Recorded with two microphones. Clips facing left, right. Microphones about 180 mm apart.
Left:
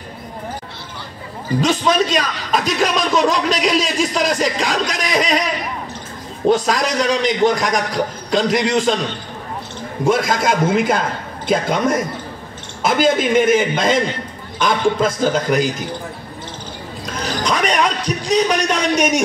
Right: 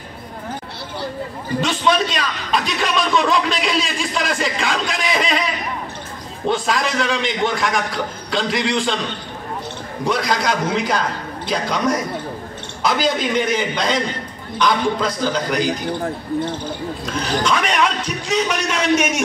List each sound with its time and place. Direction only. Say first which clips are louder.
1.6 s a man's voice: left 2 dB; 40° left (ahead or behind)
6.5 s a man's voice: left 3 dB; 40° left (ahead or behind)
10.0 s a man's voice: left 3 dB; 50° left (ahead or behind)
17.4 s a man's voice: left 2 dB; 40° left (ahead or behind)